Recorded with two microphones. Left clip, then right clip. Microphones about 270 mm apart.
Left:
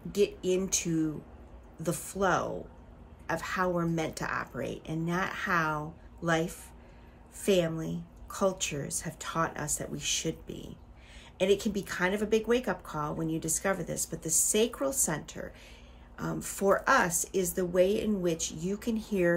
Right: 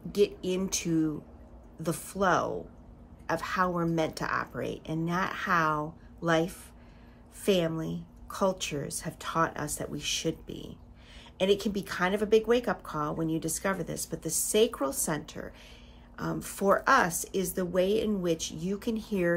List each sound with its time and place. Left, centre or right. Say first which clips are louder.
0.1 s speech: even; centre